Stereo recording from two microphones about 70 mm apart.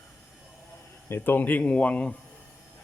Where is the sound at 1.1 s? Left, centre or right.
Left.